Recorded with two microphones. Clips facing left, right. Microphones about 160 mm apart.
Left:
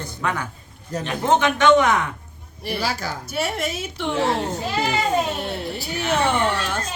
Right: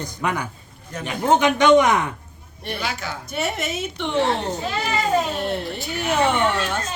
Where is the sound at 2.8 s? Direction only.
35° left (ahead or behind).